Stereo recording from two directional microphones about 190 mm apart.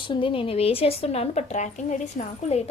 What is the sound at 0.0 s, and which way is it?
A woman's voice, 25° left (ahead or behind).